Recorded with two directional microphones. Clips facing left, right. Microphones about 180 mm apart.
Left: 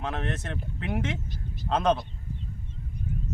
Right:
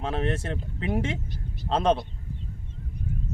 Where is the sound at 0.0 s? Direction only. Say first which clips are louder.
Right 4 dB; 30° right (ahead or behind).